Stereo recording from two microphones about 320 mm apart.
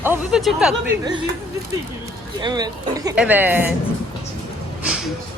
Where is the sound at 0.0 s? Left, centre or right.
Centre.